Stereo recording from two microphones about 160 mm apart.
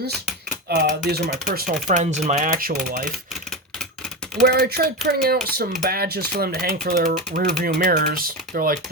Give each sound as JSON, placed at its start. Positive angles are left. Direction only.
{"t": 0.7, "sound": "speech", "side_deg": -80}
{"t": 2.0, "sound": "speech", "side_deg": -45}
{"t": 4.4, "sound": "speech", "side_deg": -75}